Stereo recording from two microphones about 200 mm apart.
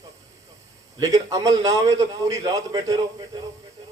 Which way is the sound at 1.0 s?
15° right (ahead or behind).